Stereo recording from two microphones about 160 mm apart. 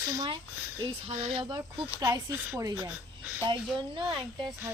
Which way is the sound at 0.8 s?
40° right (ahead or behind).